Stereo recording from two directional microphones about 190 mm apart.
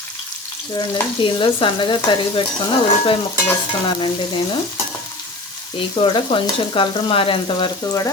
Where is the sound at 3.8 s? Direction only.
25° left (ahead or behind).